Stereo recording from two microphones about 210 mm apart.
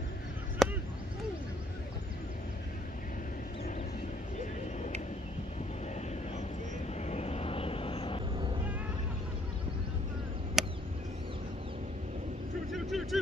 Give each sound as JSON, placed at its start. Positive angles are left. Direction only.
{"t": 0.6, "sound": "chop", "side_deg": 0}
{"t": 7.0, "sound": "vehicle", "side_deg": 30}
{"t": 10.6, "sound": "a sound", "side_deg": 0}
{"t": 12.7, "sound": "vehicle", "side_deg": 0}